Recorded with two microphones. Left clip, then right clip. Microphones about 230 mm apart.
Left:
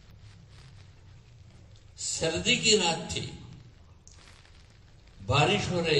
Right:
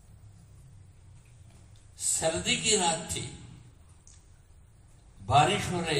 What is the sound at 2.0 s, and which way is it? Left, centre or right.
A man's voice, right.